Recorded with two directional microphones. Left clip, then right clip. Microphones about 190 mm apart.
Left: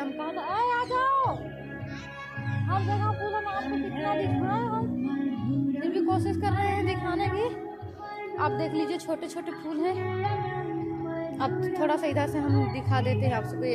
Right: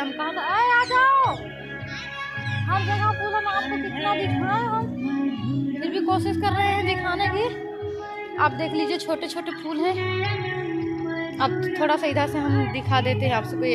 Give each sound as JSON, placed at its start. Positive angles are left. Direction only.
{"t": 0.5, "sound": "music", "side_deg": -5}
{"t": 2.7, "sound": "music", "side_deg": -10}
{"t": 8.4, "sound": "speech", "side_deg": -20}
{"t": 11.3, "sound": "speech", "side_deg": -15}